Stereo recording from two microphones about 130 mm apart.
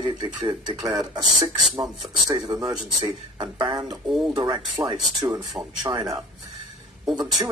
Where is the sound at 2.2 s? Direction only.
30° right (ahead or behind).